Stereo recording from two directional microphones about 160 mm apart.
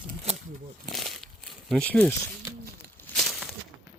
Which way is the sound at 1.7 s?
10° left (ahead or behind).